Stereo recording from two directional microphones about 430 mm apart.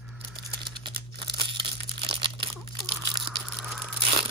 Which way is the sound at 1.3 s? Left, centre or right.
Centre.